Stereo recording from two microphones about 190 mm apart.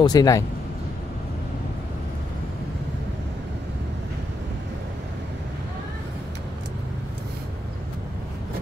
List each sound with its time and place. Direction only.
0.0 s speech: 20° left (ahead or behind)